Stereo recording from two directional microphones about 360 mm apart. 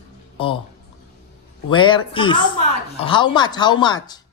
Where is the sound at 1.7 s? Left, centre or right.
Centre.